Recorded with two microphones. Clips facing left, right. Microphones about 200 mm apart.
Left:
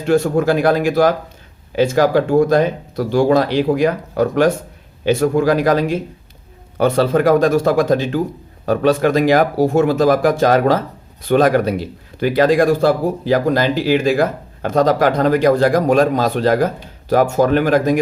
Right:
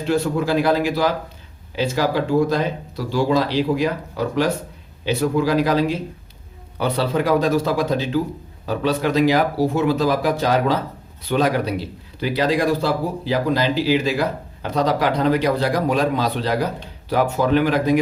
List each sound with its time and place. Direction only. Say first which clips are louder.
0.0 s a man's voice: left 5 dB; 50° left (ahead or behind)